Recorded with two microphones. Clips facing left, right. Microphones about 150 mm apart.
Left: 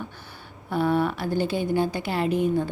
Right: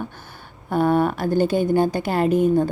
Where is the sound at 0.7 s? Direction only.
50° right (ahead or behind).